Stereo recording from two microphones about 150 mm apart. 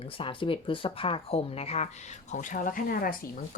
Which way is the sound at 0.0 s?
35° left (ahead or behind).